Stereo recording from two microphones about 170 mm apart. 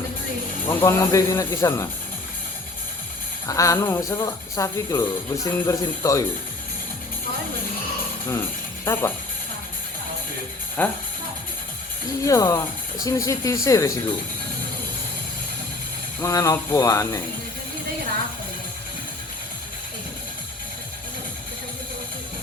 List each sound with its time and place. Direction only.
0.7 s speech: 15° left (ahead or behind)
3.4 s speech: 20° left (ahead or behind)
8.3 s speech: 15° left (ahead or behind)
10.8 s speech: 10° left (ahead or behind)
12.2 s speech: 20° left (ahead or behind)
16.2 s speech: 20° left (ahead or behind)